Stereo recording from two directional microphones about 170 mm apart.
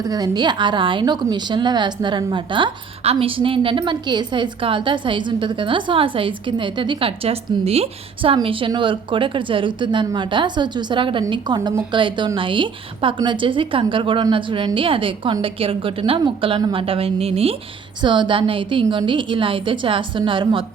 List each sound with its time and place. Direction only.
0.0 s a woman's voice: 25° right (ahead or behind)